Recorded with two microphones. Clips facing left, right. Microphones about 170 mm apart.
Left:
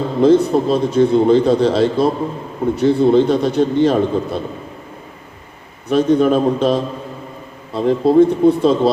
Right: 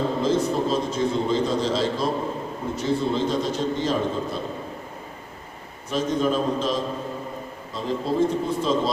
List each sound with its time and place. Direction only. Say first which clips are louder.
0.2 s a man's voice: left 14 dB; 65° left (ahead or behind)
5.9 s a man's voice: left 10 dB; 60° left (ahead or behind)